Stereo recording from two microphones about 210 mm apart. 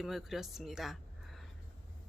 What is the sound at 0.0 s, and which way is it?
Speech, centre (ahead or behind).